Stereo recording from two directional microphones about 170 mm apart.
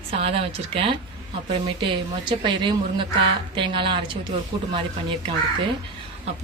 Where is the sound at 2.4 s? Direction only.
30° right (ahead or behind).